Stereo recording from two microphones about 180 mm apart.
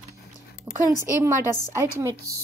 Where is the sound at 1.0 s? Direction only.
15° right (ahead or behind).